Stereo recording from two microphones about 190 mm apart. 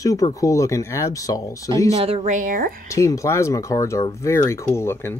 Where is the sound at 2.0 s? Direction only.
30° right (ahead or behind); by 2.9 s 50° right (ahead or behind).